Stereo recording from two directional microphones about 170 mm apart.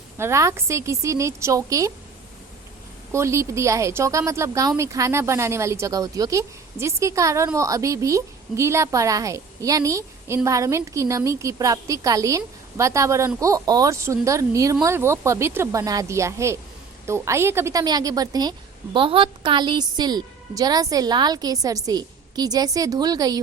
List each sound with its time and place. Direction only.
0.2 s a woman's voice: 15° right (ahead or behind)
3.1 s a woman's voice: 15° right (ahead or behind)